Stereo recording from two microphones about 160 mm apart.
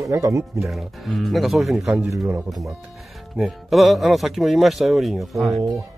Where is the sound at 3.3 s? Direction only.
Centre (ahead or behind).